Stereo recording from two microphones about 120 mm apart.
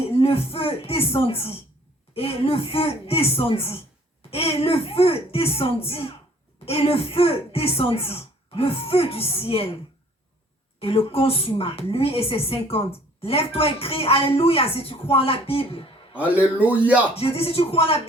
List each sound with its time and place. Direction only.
0.2 s speech: 55° left (ahead or behind)
10.8 s speech: 55° left (ahead or behind)
16.1 s a man's voice: 10° right (ahead or behind)
17.2 s speech: 55° left (ahead or behind)